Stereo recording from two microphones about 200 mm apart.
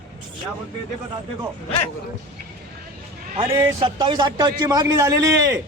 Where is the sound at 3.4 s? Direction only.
20° right (ahead or behind).